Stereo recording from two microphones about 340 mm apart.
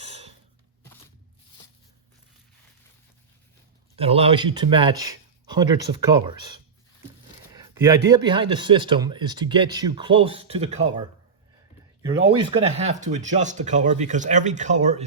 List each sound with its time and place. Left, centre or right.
0.0 s a sound: centre
3.9 s speech: centre
7.5 s speech: centre
12.5 s speech: centre